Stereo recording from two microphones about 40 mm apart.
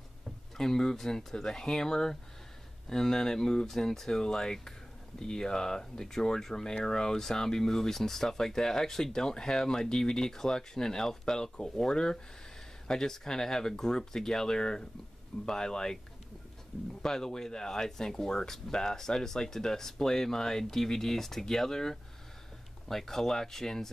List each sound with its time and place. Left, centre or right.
0.6 s speech: centre
17.0 s speech: centre